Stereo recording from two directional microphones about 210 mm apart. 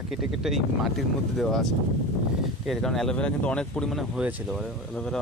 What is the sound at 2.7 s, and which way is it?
Speech, centre (ahead or behind).